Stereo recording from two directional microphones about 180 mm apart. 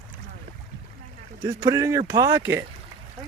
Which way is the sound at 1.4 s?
20° right (ahead or behind).